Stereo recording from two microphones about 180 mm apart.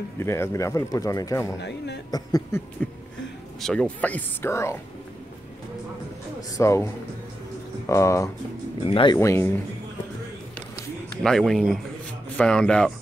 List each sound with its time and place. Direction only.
0.2 s speech: 15° left (ahead or behind)
2.8 s speech: 5° left (ahead or behind)
6.5 s speech: 15° left (ahead or behind)
8.8 s speech: 30° left (ahead or behind)
11.2 s speech: centre (ahead or behind)